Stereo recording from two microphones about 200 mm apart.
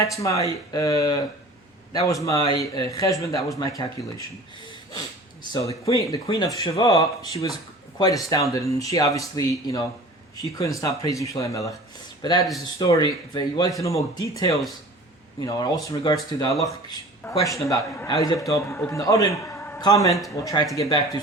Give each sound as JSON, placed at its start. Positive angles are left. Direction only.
{"t": 0.0, "sound": "a man's voice", "side_deg": 15}
{"t": 5.9, "sound": "a man's voice", "side_deg": 15}
{"t": 15.4, "sound": "a man's voice", "side_deg": 20}